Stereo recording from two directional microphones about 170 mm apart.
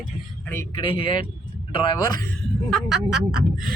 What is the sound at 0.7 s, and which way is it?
A man's voice, 30° left (ahead or behind).